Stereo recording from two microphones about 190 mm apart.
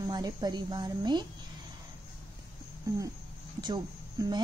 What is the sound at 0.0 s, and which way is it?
Speech, 20° right (ahead or behind).